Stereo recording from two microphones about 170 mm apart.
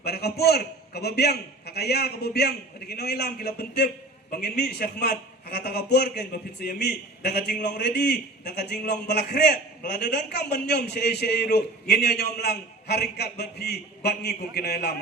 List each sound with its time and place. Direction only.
0.0 s a man's voice: 70° left (ahead or behind)